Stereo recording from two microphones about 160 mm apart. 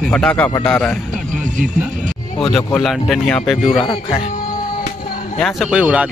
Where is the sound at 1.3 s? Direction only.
50° right (ahead or behind).